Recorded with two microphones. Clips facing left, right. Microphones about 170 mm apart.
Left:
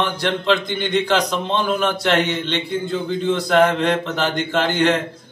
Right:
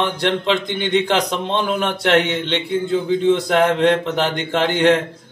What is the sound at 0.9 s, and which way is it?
Speech, 20° right (ahead or behind).